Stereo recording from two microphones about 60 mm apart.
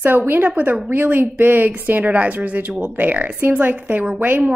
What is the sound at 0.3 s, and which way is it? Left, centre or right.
A woman's voice, right.